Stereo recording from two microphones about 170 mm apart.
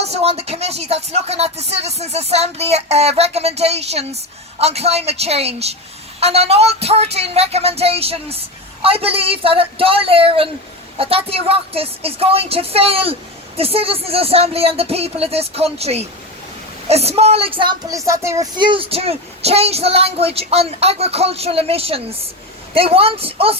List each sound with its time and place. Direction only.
0.0 s speech: 35° right (ahead or behind)